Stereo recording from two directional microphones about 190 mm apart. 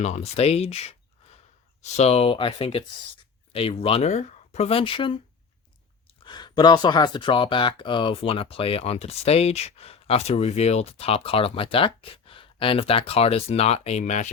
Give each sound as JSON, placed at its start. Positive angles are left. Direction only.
{"t": 0.0, "sound": "speech", "side_deg": 35}
{"t": 6.2, "sound": "speech", "side_deg": 20}